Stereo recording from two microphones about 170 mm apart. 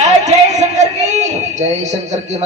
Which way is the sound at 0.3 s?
40° right (ahead or behind).